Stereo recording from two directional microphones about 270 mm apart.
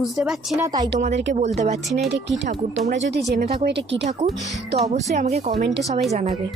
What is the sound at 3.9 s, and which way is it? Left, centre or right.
Speech, right.